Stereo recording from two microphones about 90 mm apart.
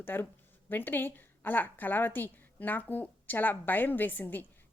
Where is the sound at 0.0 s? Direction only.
25° left (ahead or behind).